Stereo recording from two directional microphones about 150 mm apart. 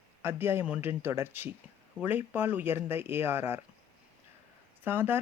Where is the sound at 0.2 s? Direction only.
15° right (ahead or behind).